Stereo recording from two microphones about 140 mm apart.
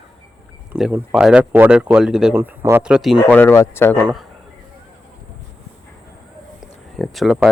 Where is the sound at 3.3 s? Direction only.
15° left (ahead or behind).